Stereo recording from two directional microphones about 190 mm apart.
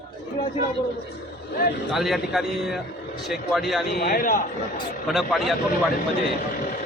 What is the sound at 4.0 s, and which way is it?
Speech, 50° left (ahead or behind).